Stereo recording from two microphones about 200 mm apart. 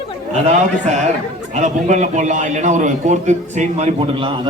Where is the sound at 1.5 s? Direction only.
35° right (ahead or behind).